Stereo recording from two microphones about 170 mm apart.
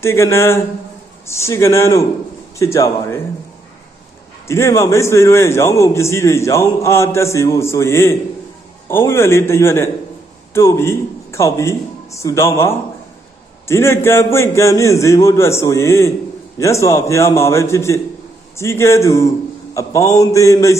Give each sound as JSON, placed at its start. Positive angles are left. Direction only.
{"t": 0.0, "sound": "a man's voice", "side_deg": 15}
{"t": 4.4, "sound": "a man's voice", "side_deg": 15}
{"t": 19.7, "sound": "mantra", "side_deg": 20}